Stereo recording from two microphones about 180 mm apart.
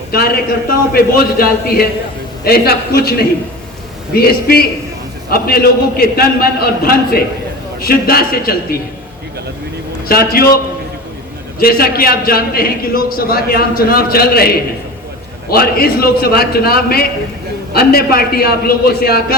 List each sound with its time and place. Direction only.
0.1 s a man's voice: 55° left (ahead or behind)
10.1 s a man's voice: 55° left (ahead or behind)
11.6 s a man's voice: 55° left (ahead or behind)